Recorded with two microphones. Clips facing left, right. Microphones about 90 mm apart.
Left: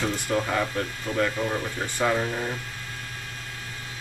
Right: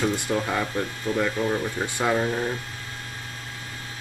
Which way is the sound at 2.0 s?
10° right (ahead or behind).